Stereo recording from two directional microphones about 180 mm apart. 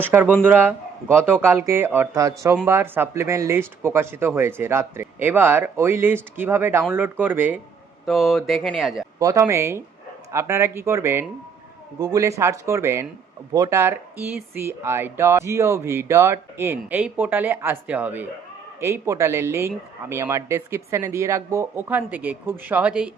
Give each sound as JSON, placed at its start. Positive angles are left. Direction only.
{"t": 0.0, "sound": "speech", "side_deg": -10}
{"t": 9.1, "sound": "speech", "side_deg": -20}